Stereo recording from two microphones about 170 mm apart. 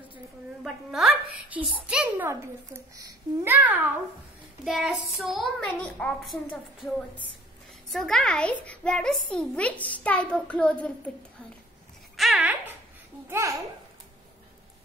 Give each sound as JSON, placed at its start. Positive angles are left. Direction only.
{"t": 0.9, "sound": "a child's voice", "side_deg": -5}
{"t": 7.9, "sound": "a child's voice", "side_deg": 5}
{"t": 12.2, "sound": "a child's voice", "side_deg": -5}